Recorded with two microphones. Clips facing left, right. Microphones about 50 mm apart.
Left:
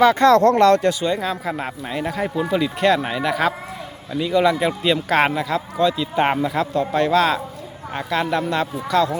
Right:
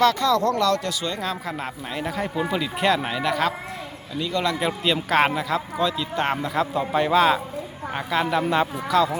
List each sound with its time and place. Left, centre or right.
0.2 s speech: left
1.2 s a man's voice: centre
4.5 s speech: centre
6.7 s speech: centre
8.4 s speech: centre
8.9 s speech: centre